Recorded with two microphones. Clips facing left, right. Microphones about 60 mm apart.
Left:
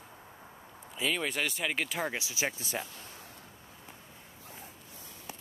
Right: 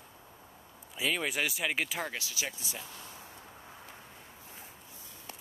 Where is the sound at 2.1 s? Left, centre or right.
Left.